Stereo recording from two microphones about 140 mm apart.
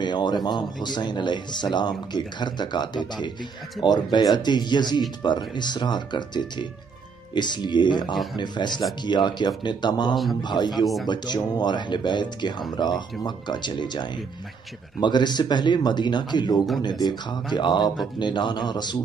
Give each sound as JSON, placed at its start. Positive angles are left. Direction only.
{"t": 0.0, "sound": "speech", "side_deg": 30}